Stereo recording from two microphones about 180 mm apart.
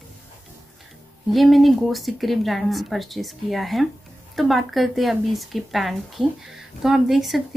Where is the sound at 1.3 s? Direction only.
Centre (ahead or behind).